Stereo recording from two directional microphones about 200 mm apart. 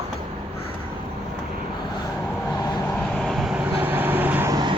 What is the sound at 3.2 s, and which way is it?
Vehicle, centre (ahead or behind).